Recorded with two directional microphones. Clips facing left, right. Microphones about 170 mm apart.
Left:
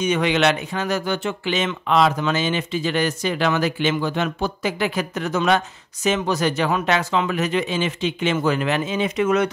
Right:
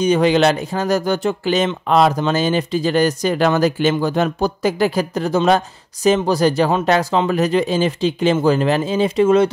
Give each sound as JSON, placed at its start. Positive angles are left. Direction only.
{"t": 0.0, "sound": "speech", "side_deg": -35}